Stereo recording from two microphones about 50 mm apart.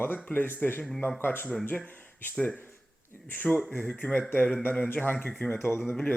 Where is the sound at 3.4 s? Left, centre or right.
Centre.